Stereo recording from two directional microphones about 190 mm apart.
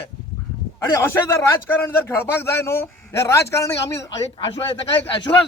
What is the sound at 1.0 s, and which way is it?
A man's voice, 15° left (ahead or behind).